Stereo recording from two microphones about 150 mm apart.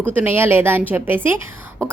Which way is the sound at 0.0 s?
15° right (ahead or behind).